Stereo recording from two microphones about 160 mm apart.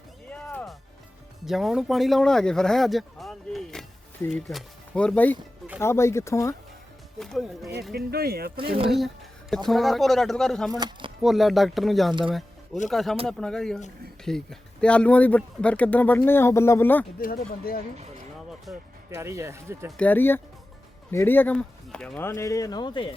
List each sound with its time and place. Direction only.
0.3 s music: 5° left (ahead or behind)
1.5 s speech: centre (ahead or behind); by 6.6 s 20° left (ahead or behind)
7.2 s speech: centre (ahead or behind)
7.9 s speech: 75° right (ahead or behind)
9.6 s speech: centre (ahead or behind)
10.7 s speech: 25° right (ahead or behind)
11.2 s speech: centre (ahead or behind)
17.2 s speech: 65° left (ahead or behind)
18.7 s speech: centre (ahead or behind)
19.1 s speech: 15° right (ahead or behind)
20.0 s speech: 10° left (ahead or behind)
22.3 s speech: 20° left (ahead or behind)